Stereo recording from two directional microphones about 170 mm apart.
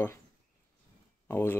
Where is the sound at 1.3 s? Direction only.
15° left (ahead or behind).